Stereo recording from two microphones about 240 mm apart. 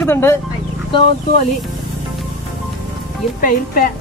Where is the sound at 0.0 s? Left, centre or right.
Centre.